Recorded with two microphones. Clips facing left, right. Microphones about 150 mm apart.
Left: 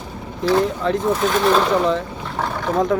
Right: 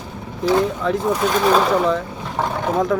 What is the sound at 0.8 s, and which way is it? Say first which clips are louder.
Speech: even; centre (ahead or behind).